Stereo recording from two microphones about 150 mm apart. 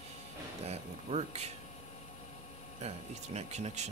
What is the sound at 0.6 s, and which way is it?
Speech, 45° right (ahead or behind).